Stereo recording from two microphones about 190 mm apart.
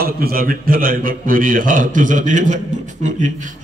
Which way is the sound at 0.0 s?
50° right (ahead or behind).